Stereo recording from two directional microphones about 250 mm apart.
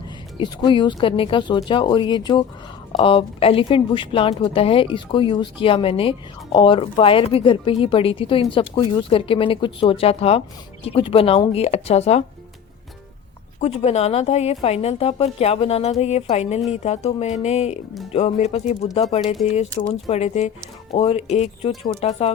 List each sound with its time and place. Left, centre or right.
0.3 s speech: centre
13.6 s speech: left